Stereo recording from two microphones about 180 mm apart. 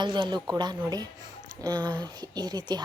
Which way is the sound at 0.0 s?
25° right (ahead or behind).